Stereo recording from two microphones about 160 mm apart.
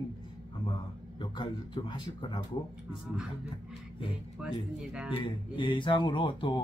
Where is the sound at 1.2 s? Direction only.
30° left (ahead or behind).